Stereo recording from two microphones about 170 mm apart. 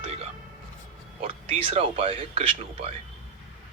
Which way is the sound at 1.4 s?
35° right (ahead or behind).